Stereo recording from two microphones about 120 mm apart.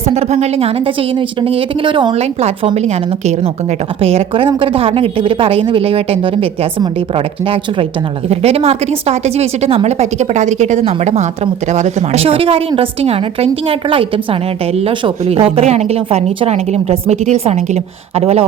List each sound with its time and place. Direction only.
0.1 s a woman's voice: 60° right (ahead or behind); by 2.1 s 45° right (ahead or behind)
2.1 s a woman's voice: 60° right (ahead or behind)